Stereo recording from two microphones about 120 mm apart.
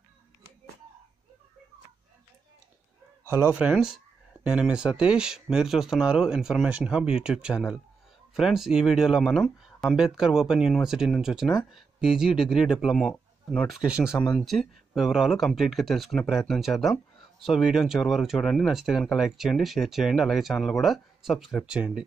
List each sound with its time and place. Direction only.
3.3 s speech: 20° right (ahead or behind)
3.7 s speech: 5° right (ahead or behind)